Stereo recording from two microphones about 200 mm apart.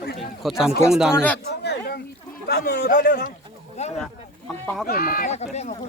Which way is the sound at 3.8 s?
35° left (ahead or behind).